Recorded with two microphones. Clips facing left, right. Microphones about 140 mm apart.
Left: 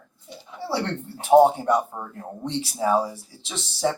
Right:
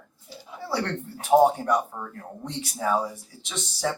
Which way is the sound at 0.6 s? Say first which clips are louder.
Left 2 dB; 25° left (ahead or behind).